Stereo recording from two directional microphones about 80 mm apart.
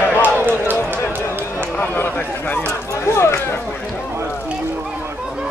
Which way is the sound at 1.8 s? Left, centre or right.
Left.